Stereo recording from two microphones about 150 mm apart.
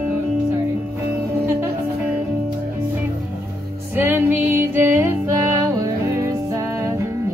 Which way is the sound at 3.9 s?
15° right (ahead or behind).